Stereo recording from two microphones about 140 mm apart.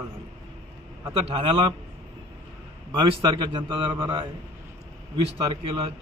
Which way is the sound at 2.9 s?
35° right (ahead or behind).